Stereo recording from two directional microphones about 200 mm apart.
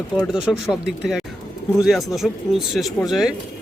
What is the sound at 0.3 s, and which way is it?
Speech, 5° right (ahead or behind).